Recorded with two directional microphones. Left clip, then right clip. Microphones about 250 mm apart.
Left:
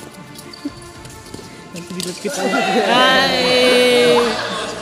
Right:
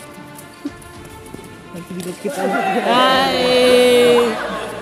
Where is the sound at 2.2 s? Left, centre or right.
Centre.